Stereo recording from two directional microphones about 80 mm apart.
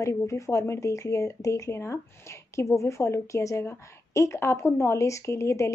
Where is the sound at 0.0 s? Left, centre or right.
Left.